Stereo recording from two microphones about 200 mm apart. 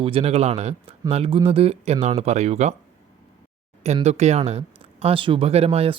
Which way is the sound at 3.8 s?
35° right (ahead or behind).